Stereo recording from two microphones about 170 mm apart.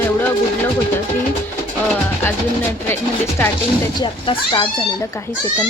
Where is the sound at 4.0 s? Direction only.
25° left (ahead or behind).